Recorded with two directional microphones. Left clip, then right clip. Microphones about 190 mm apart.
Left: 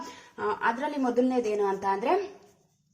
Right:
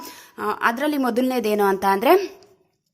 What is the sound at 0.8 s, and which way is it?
A woman's voice, 45° right (ahead or behind).